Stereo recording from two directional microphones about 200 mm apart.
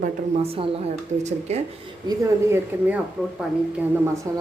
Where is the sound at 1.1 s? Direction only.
40° right (ahead or behind).